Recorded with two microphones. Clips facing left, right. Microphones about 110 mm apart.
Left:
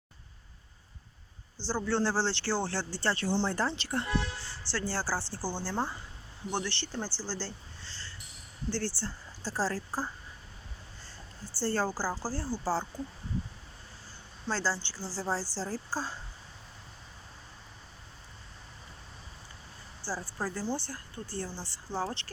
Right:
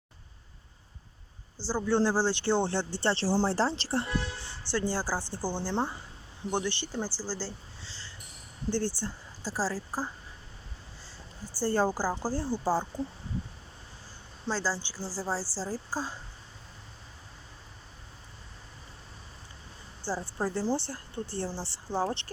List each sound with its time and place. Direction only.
1.6 s speech: 10° right (ahead or behind); by 4.1 s 30° right (ahead or behind)
4.6 s a woman's voice: 20° right (ahead or behind)
11.6 s a woman's voice: 15° right (ahead or behind)
14.4 s a woman's voice: 10° right (ahead or behind)
20.0 s speech: 20° right (ahead or behind)